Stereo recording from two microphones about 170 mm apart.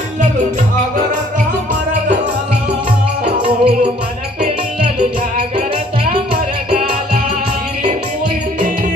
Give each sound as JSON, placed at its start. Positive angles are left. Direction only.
{"t": 3.4, "sound": "music", "side_deg": -35}
{"t": 6.3, "sound": "music", "side_deg": -60}